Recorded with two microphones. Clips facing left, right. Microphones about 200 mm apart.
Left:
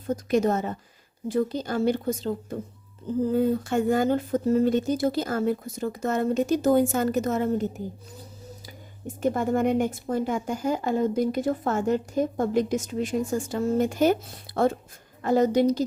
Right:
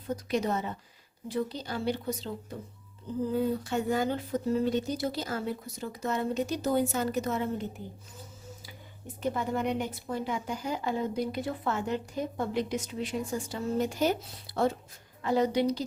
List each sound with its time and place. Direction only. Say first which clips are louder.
0.1 s a woman's voice: left 7 dB; 45° left (ahead or behind)
9.2 s a woman's voice: left 7 dB; 50° left (ahead or behind)